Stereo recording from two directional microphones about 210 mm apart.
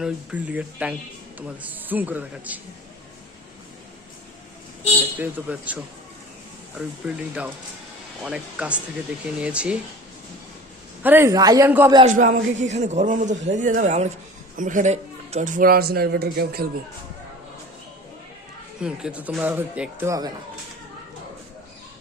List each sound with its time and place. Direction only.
0.0 s speech: 5° right (ahead or behind)
5.2 s speech: 5° right (ahead or behind)
11.0 s speech: 10° right (ahead or behind)
12.0 s a man's voice: 35° right (ahead or behind)
18.8 s speech: 5° right (ahead or behind)